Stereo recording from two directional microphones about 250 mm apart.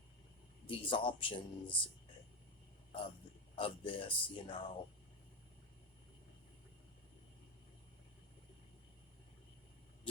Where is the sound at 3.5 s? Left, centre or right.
Left.